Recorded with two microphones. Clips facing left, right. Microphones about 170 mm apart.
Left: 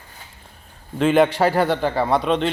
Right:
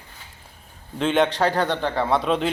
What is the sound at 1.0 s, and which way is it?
A man's voice, 5° left (ahead or behind).